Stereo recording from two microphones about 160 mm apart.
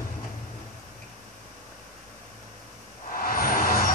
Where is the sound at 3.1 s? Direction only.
65° left (ahead or behind).